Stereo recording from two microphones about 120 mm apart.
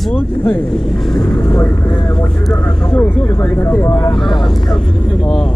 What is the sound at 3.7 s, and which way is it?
Speech, 20° left (ahead or behind).